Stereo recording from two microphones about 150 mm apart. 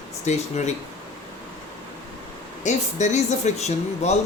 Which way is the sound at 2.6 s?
50° left (ahead or behind).